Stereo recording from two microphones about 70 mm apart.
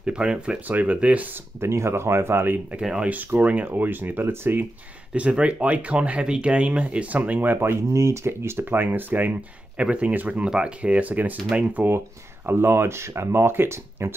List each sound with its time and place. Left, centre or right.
0.0 s speech: centre
1.6 s speech: right
2.8 s speech: centre
3.1 s speech: right
5.1 s speech: centre
7.9 s speech: right
12.4 s speech: right